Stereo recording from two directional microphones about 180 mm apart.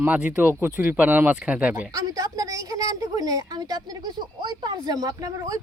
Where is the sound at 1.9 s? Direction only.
20° right (ahead or behind).